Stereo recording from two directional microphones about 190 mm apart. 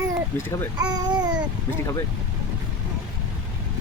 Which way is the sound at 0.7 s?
20° right (ahead or behind).